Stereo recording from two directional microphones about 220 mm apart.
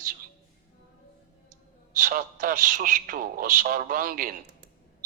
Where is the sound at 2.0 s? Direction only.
40° right (ahead or behind).